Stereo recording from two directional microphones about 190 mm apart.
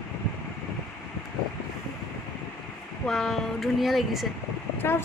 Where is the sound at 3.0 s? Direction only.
Centre (ahead or behind).